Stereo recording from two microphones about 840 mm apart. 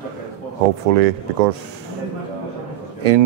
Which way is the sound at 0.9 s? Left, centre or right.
Right.